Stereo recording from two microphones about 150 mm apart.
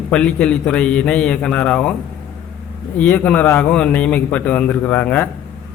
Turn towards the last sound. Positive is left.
turn(degrees=10)  # may be behind; listen again after turning